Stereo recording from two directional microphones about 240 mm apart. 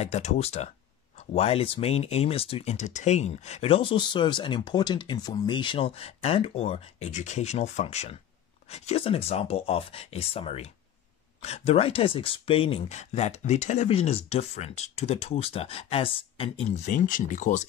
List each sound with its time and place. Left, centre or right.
0.0 s speech: left